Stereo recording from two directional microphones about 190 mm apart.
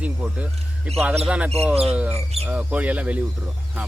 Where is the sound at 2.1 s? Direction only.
35° right (ahead or behind).